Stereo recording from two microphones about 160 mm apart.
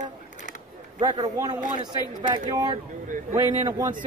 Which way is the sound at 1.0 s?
25° right (ahead or behind).